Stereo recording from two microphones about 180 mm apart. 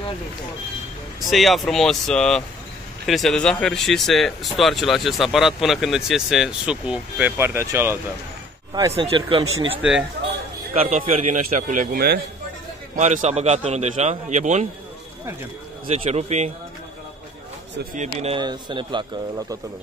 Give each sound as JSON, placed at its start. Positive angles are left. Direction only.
{"t": 1.3, "sound": "speech", "side_deg": 0}
{"t": 8.9, "sound": "a man's voice", "side_deg": -30}
{"t": 9.8, "sound": "speech", "side_deg": -5}
{"t": 10.7, "sound": "a man's voice", "side_deg": -40}
{"t": 12.9, "sound": "a man's voice", "side_deg": -40}
{"t": 15.9, "sound": "a man's voice", "side_deg": -40}
{"t": 18.2, "sound": "speech", "side_deg": -25}